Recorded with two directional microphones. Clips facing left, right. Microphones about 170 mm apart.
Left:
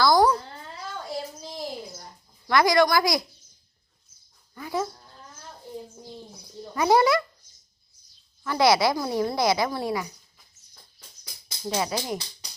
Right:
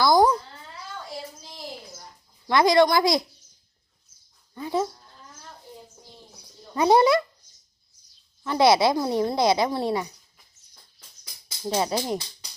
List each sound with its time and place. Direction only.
0.0 s a sound: 20° right (ahead or behind)
2.5 s speech: 25° right (ahead or behind)
4.5 s speech: 25° right (ahead or behind)
6.7 s speech: 25° right (ahead or behind)
8.4 s speech: 25° right (ahead or behind)
11.6 s speech: 25° right (ahead or behind)